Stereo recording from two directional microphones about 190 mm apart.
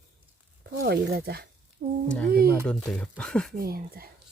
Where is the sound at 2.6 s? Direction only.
5° left (ahead or behind).